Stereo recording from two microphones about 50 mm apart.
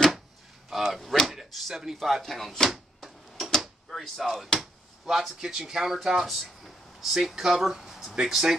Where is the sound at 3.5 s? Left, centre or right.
Centre.